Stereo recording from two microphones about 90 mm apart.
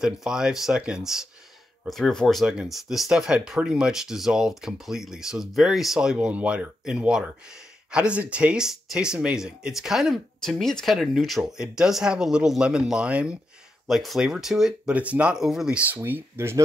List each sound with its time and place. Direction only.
0.0 s speech: 5° right (ahead or behind)
15.9 s speech: 25° right (ahead or behind)